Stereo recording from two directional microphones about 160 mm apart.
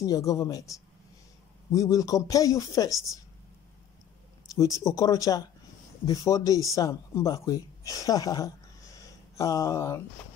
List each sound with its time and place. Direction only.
0.0 s speech: 20° left (ahead or behind)
4.6 s a man's voice: 20° left (ahead or behind)